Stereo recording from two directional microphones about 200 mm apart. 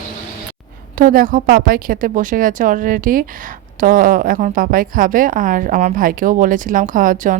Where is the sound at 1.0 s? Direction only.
45° right (ahead or behind).